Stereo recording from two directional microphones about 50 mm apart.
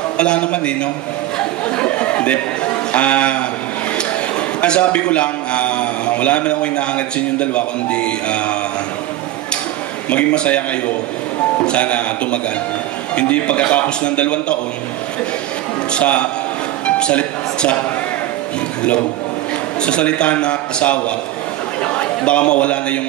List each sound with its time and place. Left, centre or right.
0.2 s a man's voice: left
1.8 s chatter: left
2.9 s a man's voice: left
4.6 s a man's voice: left
10.0 s a man's voice: left
15.9 s a man's voice: left
19.8 s a man's voice: left